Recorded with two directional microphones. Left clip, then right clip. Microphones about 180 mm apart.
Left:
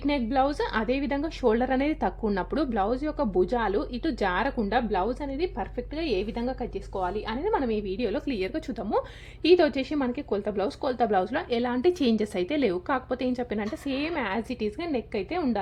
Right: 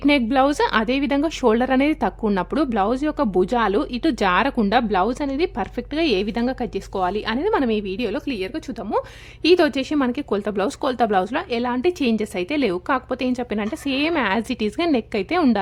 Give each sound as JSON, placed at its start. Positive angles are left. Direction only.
{"t": 0.0, "sound": "a woman's voice", "side_deg": -35}